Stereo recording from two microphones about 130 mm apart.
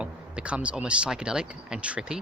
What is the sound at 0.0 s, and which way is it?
Speech, 10° right (ahead or behind).